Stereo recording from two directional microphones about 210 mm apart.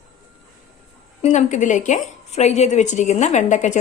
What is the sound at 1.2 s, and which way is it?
A woman's voice, 35° left (ahead or behind).